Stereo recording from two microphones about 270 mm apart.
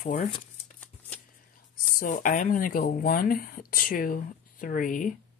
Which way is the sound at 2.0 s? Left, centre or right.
Left.